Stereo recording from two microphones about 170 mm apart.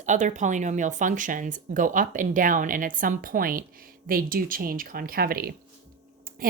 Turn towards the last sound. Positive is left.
turn(degrees=-60)  # may be behind; listen again after turning